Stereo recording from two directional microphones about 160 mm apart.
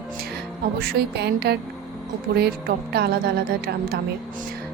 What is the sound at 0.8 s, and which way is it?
A woman's voice, 80° right.